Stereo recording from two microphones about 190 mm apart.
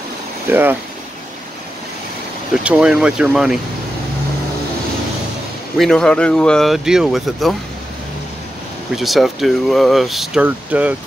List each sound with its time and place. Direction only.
0.5 s speech: 10° right (ahead or behind)
2.5 s speech: 5° right (ahead or behind)
5.8 s speech: 5° left (ahead or behind)
8.9 s speech: centre (ahead or behind)